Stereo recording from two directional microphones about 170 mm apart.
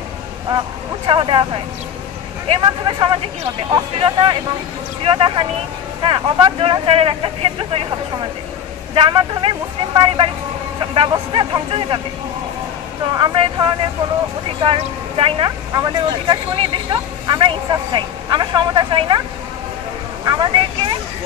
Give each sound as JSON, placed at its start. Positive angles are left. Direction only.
{"t": 1.0, "sound": "speech", "side_deg": -30}
{"t": 8.9, "sound": "speech", "side_deg": -30}
{"t": 13.1, "sound": "speech", "side_deg": -30}
{"t": 14.8, "sound": "speech", "side_deg": -30}
{"t": 20.2, "sound": "speech", "side_deg": -25}